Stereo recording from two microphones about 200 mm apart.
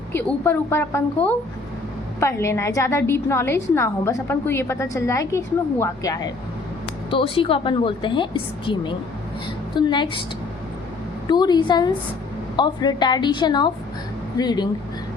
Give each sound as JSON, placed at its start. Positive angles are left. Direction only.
{"t": 0.1, "sound": "a woman's voice", "side_deg": 10}
{"t": 11.3, "sound": "a woman's voice", "side_deg": 20}